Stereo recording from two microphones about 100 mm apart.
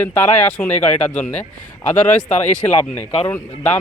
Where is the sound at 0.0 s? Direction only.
20° left (ahead or behind).